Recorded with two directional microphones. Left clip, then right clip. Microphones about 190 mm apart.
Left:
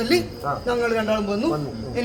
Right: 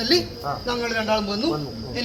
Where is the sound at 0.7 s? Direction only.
10° left (ahead or behind).